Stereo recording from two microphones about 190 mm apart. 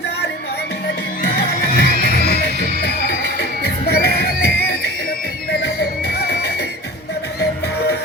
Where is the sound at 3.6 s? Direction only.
60° left (ahead or behind).